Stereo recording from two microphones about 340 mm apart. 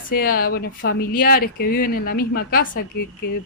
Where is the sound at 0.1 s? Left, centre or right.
Left.